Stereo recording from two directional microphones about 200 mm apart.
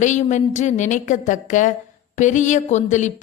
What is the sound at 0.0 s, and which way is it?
Speech, 35° left (ahead or behind).